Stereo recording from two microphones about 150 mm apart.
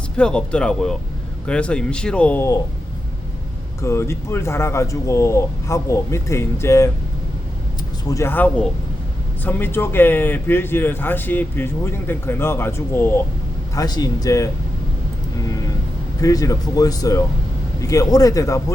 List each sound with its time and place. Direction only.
0.2 s speech: 5° left (ahead or behind)
3.8 s speech: 20° left (ahead or behind)
8.0 s speech: 20° left (ahead or behind)
13.7 s speech: 25° left (ahead or behind)
16.2 s speech: 25° left (ahead or behind)